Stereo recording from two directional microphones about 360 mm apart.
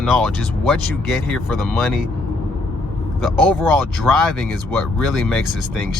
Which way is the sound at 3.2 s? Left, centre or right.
Centre.